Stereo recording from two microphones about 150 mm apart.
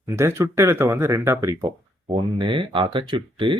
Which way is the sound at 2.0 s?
35° right (ahead or behind).